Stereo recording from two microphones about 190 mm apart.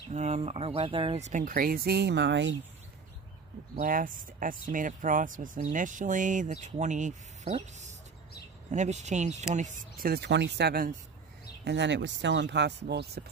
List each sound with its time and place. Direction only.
0.1 s speech: 35° right (ahead or behind); by 2.5 s 70° right (ahead or behind)
3.7 s speech: 45° right (ahead or behind)
9.6 s speech: 50° right (ahead or behind)
11.6 s speech: 65° right (ahead or behind)